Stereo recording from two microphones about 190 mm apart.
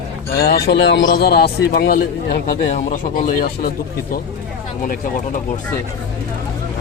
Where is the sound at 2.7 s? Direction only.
40° left (ahead or behind).